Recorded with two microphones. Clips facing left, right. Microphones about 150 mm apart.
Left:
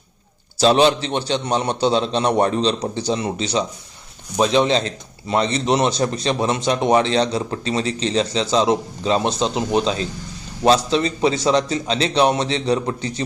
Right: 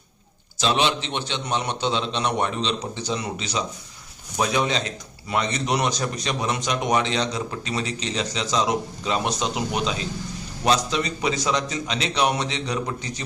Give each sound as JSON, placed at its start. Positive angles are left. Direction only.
{"t": 0.6, "sound": "a man's voice", "side_deg": 35}